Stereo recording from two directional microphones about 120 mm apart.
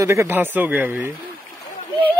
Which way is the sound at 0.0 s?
25° right (ahead or behind).